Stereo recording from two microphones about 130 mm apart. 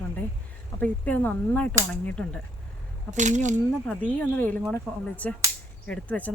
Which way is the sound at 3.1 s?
70° right (ahead or behind).